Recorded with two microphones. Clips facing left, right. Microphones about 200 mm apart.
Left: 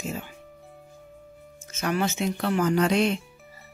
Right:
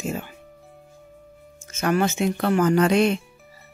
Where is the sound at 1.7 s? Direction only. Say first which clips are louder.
Right 5 dB; 50° right (ahead or behind).